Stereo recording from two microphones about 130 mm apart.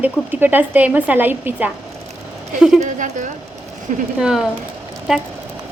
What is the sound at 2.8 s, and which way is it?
Speech, 70° right (ahead or behind).